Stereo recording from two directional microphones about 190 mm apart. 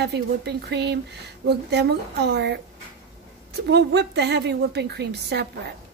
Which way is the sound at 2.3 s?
60° right (ahead or behind).